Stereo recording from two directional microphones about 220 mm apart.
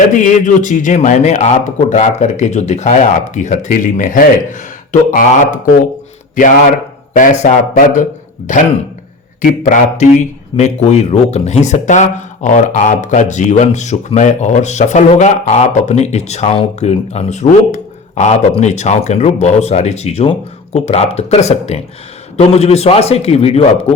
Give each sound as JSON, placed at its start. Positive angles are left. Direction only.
{"t": 0.2, "sound": "speech", "side_deg": 35}
{"t": 7.2, "sound": "speech", "side_deg": 35}
{"t": 9.4, "sound": "a man's voice", "side_deg": 35}